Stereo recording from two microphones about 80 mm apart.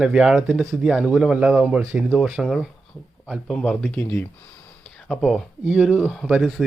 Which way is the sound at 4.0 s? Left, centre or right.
Left.